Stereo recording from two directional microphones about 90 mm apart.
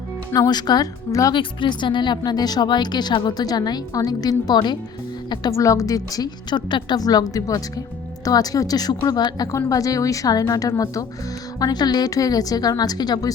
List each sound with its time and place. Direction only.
0.3 s speech: 45° left (ahead or behind)
1.3 s speech: 65° left (ahead or behind)
5.5 s speech: 35° left (ahead or behind)
9.5 s a woman's voice: 40° left (ahead or behind)